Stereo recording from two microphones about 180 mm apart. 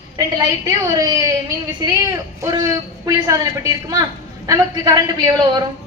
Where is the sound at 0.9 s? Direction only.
20° right (ahead or behind).